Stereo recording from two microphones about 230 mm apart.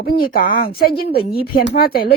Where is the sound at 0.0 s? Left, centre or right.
Left.